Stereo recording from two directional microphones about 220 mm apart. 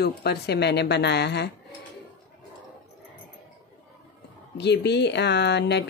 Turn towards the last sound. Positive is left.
turn(degrees=50)  # may be behind; listen again after turning